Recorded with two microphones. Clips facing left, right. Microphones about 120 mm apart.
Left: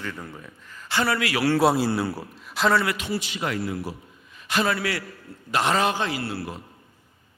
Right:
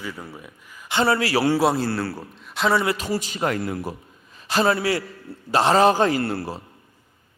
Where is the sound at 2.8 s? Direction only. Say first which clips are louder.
Right 3 dB; 35° right (ahead or behind).